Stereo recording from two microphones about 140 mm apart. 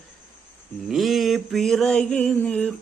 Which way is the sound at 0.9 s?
Centre (ahead or behind).